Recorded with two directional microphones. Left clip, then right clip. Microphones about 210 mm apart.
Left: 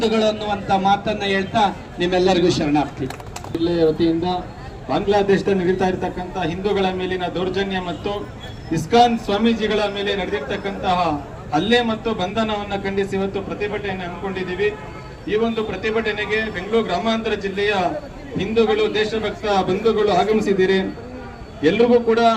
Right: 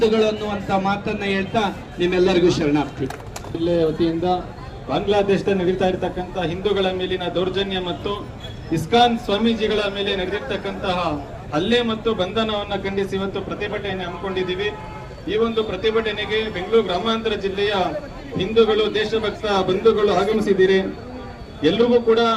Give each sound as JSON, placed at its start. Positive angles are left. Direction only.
{"t": 0.0, "sound": "a man's voice", "side_deg": 45}
{"t": 15.3, "sound": "a man's voice", "side_deg": 40}